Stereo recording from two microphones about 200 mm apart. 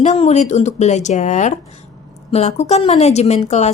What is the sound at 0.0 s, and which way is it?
Speech, 35° left (ahead or behind).